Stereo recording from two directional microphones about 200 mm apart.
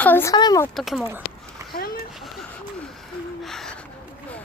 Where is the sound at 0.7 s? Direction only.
Centre (ahead or behind).